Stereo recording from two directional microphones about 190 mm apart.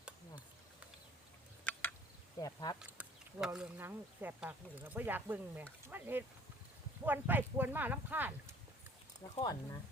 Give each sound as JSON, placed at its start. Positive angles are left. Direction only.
{"t": 1.7, "sound": "a sound", "side_deg": 10}
{"t": 2.4, "sound": "speech", "side_deg": 20}
{"t": 2.7, "sound": "speech", "side_deg": -5}
{"t": 9.3, "sound": "speech", "side_deg": 20}